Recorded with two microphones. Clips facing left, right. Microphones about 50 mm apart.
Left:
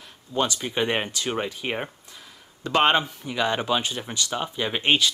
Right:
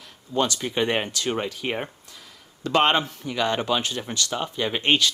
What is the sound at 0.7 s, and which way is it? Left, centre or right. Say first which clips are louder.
Speech: right 1 dB; centre.